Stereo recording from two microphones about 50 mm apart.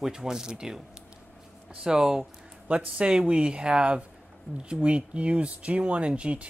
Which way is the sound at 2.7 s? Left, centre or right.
Right.